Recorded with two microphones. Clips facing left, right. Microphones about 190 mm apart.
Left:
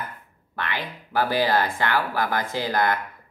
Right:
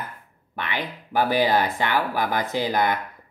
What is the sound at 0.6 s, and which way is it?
Speech, 15° right (ahead or behind).